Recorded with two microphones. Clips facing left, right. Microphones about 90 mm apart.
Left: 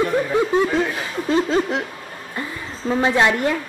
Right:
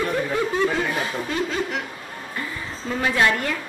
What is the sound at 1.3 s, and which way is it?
Speech, 30° left (ahead or behind).